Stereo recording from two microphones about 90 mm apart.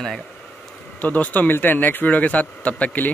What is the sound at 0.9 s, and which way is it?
A man's voice, 15° left (ahead or behind).